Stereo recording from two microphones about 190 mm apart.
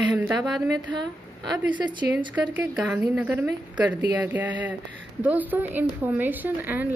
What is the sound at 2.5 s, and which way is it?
A woman's voice, 5° right (ahead or behind).